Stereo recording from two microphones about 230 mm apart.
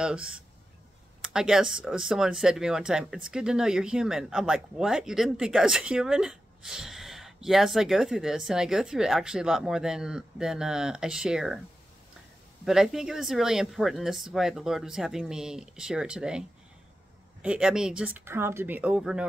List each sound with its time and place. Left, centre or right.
0.0 s speech: centre
12.6 s speech: centre